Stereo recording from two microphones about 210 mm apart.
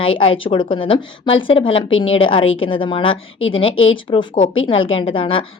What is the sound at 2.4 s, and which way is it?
Speech, 70° left (ahead or behind).